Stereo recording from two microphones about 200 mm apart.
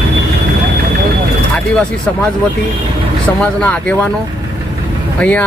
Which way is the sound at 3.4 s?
5° left (ahead or behind).